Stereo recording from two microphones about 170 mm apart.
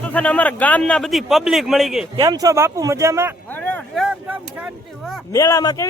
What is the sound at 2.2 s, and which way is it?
Speech, 20° right (ahead or behind).